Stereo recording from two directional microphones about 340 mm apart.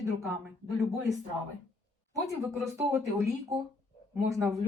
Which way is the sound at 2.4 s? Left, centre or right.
Centre.